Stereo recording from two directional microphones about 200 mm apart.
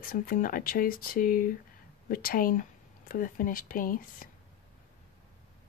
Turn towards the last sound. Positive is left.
turn(degrees=45)  # may be behind; listen again after turning